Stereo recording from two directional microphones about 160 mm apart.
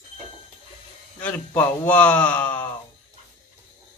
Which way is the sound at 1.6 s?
10° left (ahead or behind).